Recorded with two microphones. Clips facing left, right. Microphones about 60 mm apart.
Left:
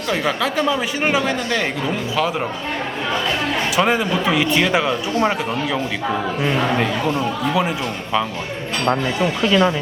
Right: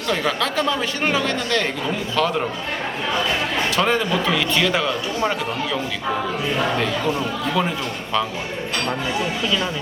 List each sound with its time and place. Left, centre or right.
0.1 s a man's voice: centre
3.8 s a man's voice: centre
7.2 s a man's voice: centre
9.5 s speech: left